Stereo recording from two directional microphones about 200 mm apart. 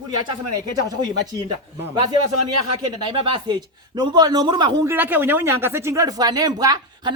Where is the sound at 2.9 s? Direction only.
25° right (ahead or behind).